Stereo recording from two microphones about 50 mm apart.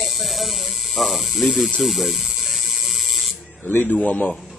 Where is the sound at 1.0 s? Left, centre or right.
Centre.